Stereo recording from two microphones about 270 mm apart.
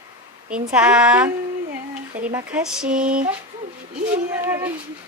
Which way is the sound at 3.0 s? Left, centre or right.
Right.